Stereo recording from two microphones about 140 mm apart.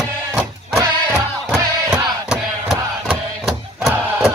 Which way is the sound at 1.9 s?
5° right (ahead or behind).